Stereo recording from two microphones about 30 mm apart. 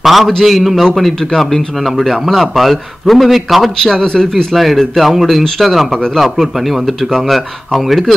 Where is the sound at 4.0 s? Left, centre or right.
Left.